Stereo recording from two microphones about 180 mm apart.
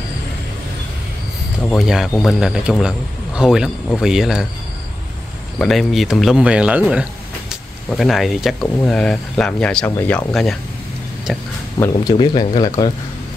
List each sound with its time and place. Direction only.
1.8 s speech: centre (ahead or behind)
5.6 s speech: centre (ahead or behind)
11.8 s speech: 20° left (ahead or behind)